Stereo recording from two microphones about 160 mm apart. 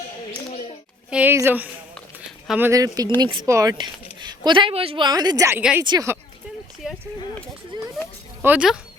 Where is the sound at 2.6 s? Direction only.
20° right (ahead or behind).